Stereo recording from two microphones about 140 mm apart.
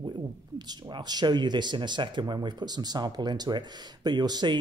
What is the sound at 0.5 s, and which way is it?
Speech, 30° right (ahead or behind).